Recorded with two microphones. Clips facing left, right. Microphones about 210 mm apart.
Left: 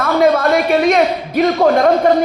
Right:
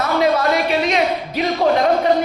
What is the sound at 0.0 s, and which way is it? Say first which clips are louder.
Speech: left 4 dB; 50° left (ahead or behind).